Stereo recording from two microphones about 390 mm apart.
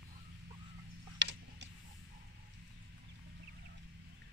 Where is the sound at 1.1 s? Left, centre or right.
Right.